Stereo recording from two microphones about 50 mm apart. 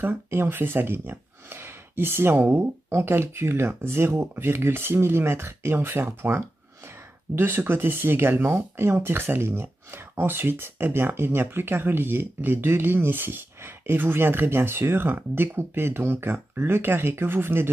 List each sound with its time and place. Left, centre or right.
0.0 s speech: right